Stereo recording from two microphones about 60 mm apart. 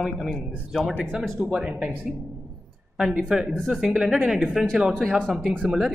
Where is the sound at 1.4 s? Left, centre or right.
Centre.